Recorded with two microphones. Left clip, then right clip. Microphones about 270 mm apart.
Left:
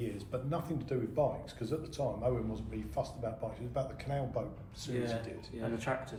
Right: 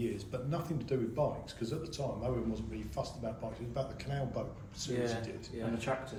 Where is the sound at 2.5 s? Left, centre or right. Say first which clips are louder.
Left 1 dB; left.